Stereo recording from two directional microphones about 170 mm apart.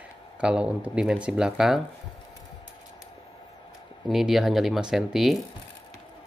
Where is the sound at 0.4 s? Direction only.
5° right (ahead or behind).